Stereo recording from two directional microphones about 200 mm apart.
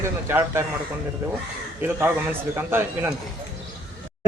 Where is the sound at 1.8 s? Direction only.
10° right (ahead or behind).